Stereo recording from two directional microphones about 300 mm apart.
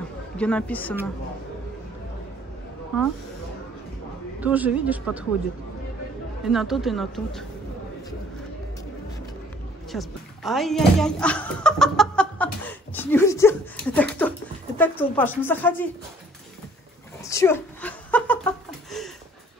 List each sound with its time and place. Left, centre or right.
0.4 s speech: centre
2.9 s speech: centre
4.4 s speech: centre
6.5 s speech: centre
9.9 s speech: centre
17.2 s a sound: centre